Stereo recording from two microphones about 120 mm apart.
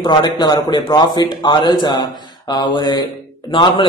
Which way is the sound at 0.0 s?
35° left (ahead or behind).